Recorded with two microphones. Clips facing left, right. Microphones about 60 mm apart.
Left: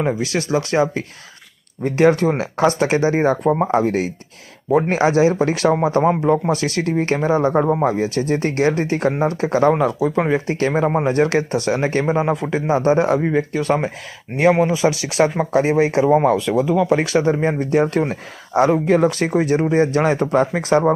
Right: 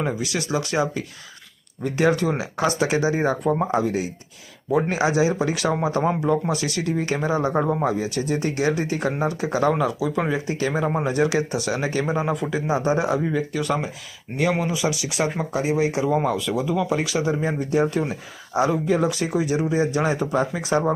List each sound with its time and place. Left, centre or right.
0.2 s speech: left
9.0 s speech: left
9.3 s speech: left
10.8 s speech: left
11.1 s speech: left
13.2 s speech: left
16.3 s speech: left